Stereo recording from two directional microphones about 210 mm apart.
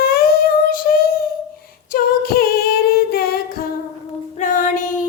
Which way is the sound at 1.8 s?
45° left (ahead or behind).